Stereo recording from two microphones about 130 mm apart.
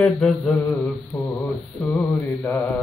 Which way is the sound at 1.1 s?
15° left (ahead or behind).